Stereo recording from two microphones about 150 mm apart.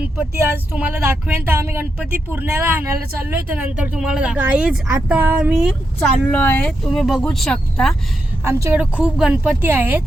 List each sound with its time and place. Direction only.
0.2 s speech: 10° right (ahead or behind)
6.2 s speech: 10° left (ahead or behind)
8.4 s a woman's voice: 20° right (ahead or behind)
8.8 s speech: 10° right (ahead or behind)